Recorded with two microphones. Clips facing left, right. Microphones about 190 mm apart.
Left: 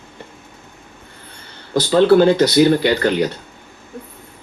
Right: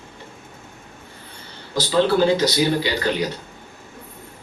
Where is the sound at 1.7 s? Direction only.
60° left (ahead or behind).